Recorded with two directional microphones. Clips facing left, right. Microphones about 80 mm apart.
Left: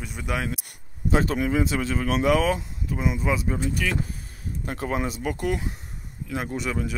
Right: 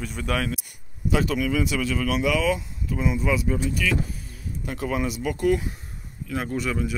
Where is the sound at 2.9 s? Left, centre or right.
Left.